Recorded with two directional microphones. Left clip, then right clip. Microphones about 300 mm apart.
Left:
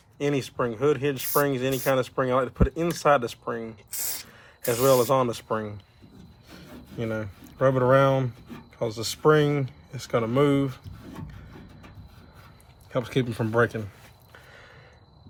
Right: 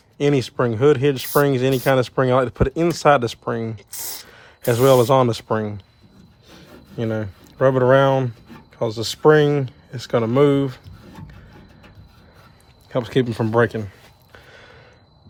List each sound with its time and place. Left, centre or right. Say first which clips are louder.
0.2 s speech: right 7 dB; right
4.0 s speech: right 2 dB; centre
4.3 s speech: right 7 dB; right
12.9 s speech: right 7 dB; right
14.3 s a sound: right 5 dB; right